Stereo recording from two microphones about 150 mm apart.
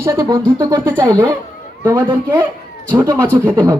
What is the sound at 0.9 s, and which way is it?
Speech, 10° left (ahead or behind).